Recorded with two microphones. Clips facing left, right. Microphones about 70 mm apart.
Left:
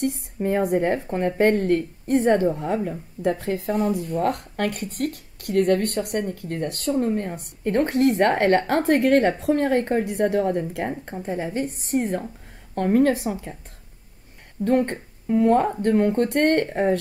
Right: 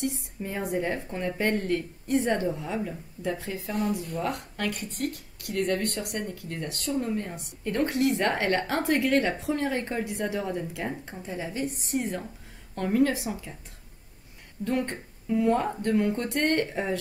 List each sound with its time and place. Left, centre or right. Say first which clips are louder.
0.0 s a woman's voice: left 7 dB; left
14.6 s a woman's voice: left 8 dB; left